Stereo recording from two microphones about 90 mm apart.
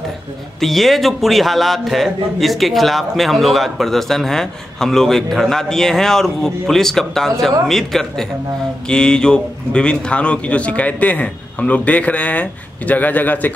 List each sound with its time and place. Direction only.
0.6 s a man's voice: centre (ahead or behind); by 13.5 s 20° left (ahead or behind)